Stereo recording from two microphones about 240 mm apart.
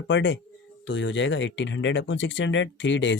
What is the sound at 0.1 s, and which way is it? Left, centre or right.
Speech, left.